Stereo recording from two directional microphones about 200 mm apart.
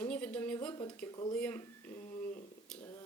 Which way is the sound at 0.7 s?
20° left (ahead or behind).